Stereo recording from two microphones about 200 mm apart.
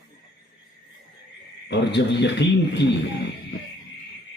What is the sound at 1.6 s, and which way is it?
A man's voice, 60° left (ahead or behind).